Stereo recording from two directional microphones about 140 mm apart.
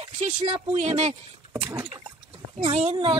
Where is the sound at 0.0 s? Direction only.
45° right (ahead or behind).